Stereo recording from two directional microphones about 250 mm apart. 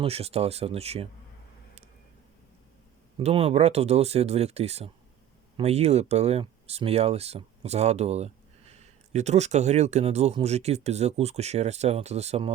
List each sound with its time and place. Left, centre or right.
0.0 s speech: right
3.2 s speech: right